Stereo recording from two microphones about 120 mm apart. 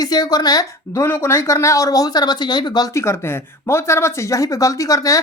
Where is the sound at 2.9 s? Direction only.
25° left (ahead or behind).